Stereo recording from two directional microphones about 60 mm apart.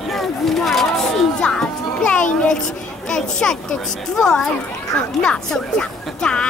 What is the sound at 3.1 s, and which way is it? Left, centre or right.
Speech, centre.